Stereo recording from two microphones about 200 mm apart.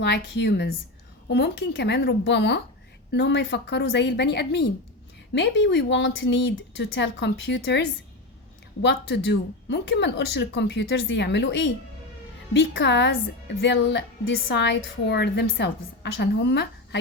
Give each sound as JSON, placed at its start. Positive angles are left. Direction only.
{"t": 0.0, "sound": "a woman's voice", "side_deg": 55}
{"t": 8.8, "sound": "a woman's voice", "side_deg": 60}